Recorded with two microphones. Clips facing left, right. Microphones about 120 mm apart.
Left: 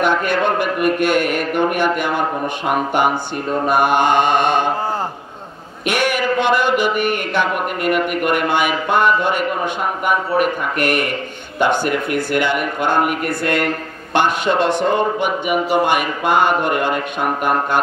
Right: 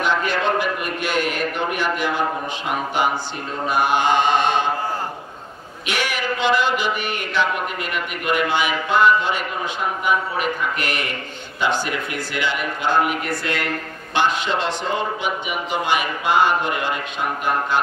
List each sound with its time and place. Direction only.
0.0 s a man's voice: 55° left (ahead or behind)
5.9 s a man's voice: 50° left (ahead or behind)